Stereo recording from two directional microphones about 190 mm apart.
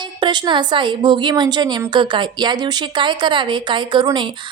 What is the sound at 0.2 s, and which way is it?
A woman's voice, 25° right (ahead or behind).